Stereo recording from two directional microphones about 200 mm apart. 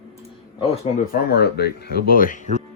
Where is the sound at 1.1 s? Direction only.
50° left (ahead or behind).